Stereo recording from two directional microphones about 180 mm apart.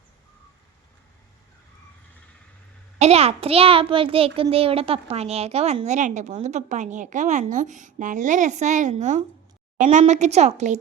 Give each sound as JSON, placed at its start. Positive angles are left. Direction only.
{"t": 3.0, "sound": "a woman's voice", "side_deg": -35}